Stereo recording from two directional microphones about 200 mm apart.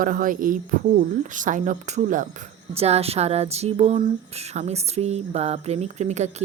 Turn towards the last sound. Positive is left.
turn(degrees=-35)  # may be behind; listen again after turning